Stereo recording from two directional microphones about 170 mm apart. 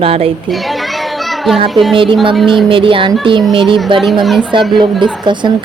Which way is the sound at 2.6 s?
30° right (ahead or behind).